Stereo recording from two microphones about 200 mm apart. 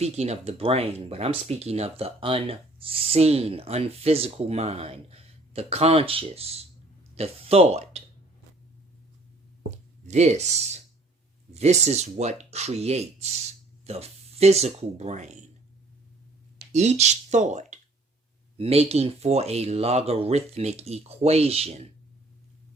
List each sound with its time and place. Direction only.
0.0 s speech: 35° right (ahead or behind)
10.1 s speech: 35° right (ahead or behind)
16.7 s speech: 35° right (ahead or behind)